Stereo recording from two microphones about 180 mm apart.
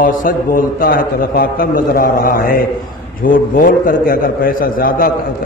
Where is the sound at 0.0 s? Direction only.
50° left (ahead or behind).